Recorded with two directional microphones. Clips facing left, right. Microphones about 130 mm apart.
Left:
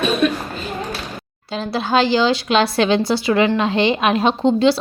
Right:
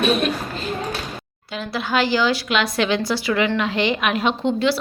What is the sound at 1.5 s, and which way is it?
A woman's voice, 30° left (ahead or behind).